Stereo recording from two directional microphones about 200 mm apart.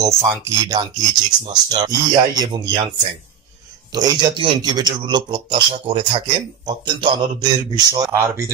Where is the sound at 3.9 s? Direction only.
20° right (ahead or behind).